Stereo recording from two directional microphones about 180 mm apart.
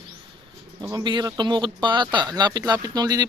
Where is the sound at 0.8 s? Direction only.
20° right (ahead or behind).